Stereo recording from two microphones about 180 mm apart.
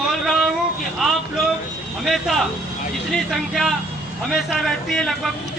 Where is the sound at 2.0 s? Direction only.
Centre (ahead or behind).